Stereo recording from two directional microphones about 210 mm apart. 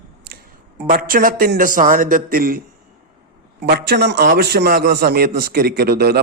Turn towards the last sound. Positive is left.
turn(degrees=-50)  # may be behind; listen again after turning